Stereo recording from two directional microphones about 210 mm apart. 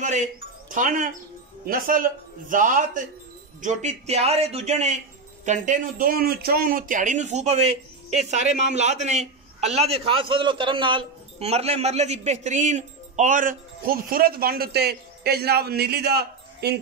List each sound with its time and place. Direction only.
0.0 s doorbell: 35° right (ahead or behind)
1.7 s a man's voice: 40° right (ahead or behind)